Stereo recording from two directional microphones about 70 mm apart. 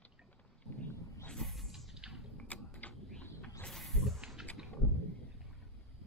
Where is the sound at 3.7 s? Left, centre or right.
Centre.